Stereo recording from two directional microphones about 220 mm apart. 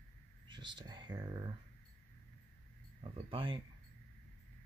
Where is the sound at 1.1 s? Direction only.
20° right (ahead or behind).